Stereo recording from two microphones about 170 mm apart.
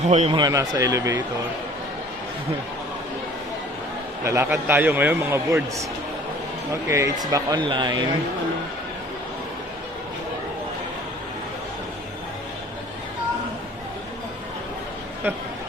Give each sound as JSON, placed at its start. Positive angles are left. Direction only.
{"t": 0.0, "sound": "a man's voice", "side_deg": -40}
{"t": 0.3, "sound": "speech", "side_deg": -20}
{"t": 4.2, "sound": "a man's voice", "side_deg": -15}
{"t": 6.8, "sound": "speech", "side_deg": -15}